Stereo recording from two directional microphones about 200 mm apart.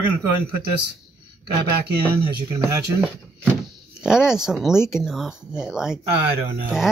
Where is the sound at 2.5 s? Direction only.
15° right (ahead or behind).